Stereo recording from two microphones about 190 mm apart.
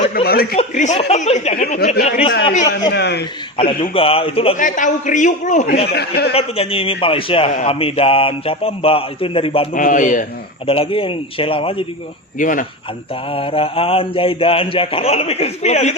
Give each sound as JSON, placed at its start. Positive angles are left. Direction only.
{"t": 0.1, "sound": "a man's voice", "side_deg": 55}
{"t": 0.5, "sound": "a man's voice", "side_deg": 40}
{"t": 2.0, "sound": "a man's voice", "side_deg": 35}
{"t": 2.9, "sound": "speech", "side_deg": 60}
{"t": 3.6, "sound": "a man's voice", "side_deg": 30}
{"t": 4.5, "sound": "a man's voice", "side_deg": 40}
{"t": 5.8, "sound": "speech", "side_deg": 55}
{"t": 6.3, "sound": "a man's voice", "side_deg": 30}
{"t": 9.7, "sound": "a man's voice", "side_deg": 45}
{"t": 10.7, "sound": "a man's voice", "side_deg": 30}
{"t": 12.4, "sound": "a man's voice", "side_deg": 45}
{"t": 13.3, "sound": "a man's voice", "side_deg": 30}